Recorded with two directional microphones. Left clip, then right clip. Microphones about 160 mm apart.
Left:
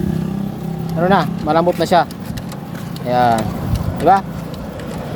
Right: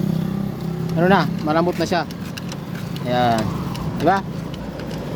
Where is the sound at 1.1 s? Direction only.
Centre (ahead or behind).